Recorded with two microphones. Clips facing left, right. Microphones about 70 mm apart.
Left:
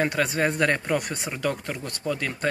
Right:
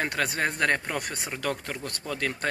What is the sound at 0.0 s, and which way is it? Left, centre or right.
Speech, right.